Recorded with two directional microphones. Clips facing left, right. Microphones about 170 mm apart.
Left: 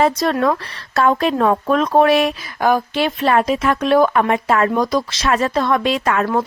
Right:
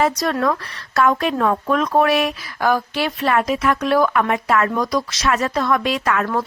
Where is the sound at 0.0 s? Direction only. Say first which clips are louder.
Left 3 dB; 30° left (ahead or behind).